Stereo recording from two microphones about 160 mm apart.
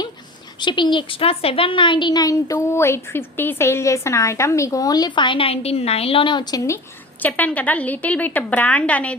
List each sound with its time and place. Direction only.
0.6 s a woman's voice: 30° left (ahead or behind)
7.2 s a woman's voice: 10° left (ahead or behind)